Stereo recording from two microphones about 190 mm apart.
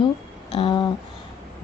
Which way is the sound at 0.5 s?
25° left (ahead or behind).